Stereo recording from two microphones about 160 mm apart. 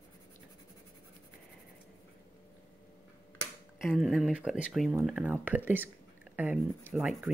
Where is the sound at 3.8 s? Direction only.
Centre (ahead or behind).